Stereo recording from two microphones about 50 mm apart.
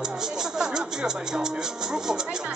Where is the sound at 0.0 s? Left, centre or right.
Centre.